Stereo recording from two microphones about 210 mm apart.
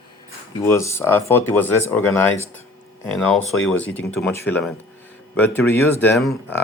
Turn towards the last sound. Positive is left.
turn(degrees=5)  # may be behind; listen again after turning